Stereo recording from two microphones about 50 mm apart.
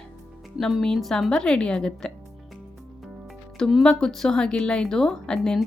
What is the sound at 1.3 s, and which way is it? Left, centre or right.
Speech, centre.